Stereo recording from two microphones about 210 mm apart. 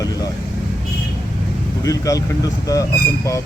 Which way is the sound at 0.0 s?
20° left (ahead or behind).